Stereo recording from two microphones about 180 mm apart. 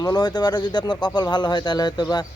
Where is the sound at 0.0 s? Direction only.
25° left (ahead or behind).